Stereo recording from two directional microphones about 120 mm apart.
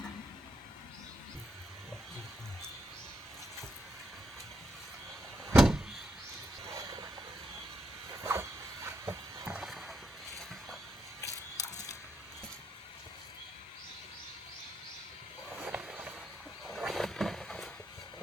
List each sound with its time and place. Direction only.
5.5 s vehicle: centre (ahead or behind)
6.7 s vehicle: 30° right (ahead or behind)
8.1 s a sound: 25° right (ahead or behind)
9.6 s rowboat: 5° right (ahead or behind)
11.2 s camera: 30° left (ahead or behind)
15.5 s a sound: 15° right (ahead or behind)
16.6 s wild animals: centre (ahead or behind)